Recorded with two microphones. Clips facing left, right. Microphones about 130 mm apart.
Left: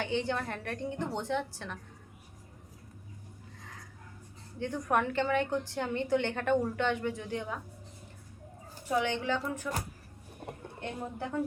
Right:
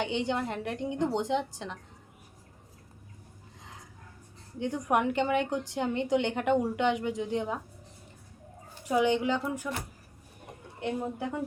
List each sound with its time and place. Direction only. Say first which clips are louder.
0.0 s a woman's voice: right 2 dB; 20° right (ahead or behind)
3.6 s a sound: right 2 dB; 20° right (ahead or behind)
4.6 s a woman's voice: right 3 dB; 15° right (ahead or behind)
8.9 s a woman's voice: right 4 dB; 15° right (ahead or behind)
10.8 s a woman's voice: right 6 dB; 15° right (ahead or behind)